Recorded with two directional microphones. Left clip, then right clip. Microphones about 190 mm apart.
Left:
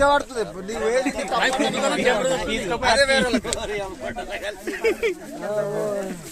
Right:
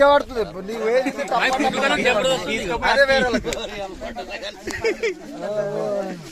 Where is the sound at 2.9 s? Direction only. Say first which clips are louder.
Right 2 dB; 35° right (ahead or behind).